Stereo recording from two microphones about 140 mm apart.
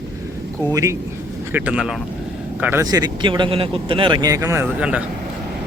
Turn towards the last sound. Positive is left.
turn(degrees=-10)  # may be behind; listen again after turning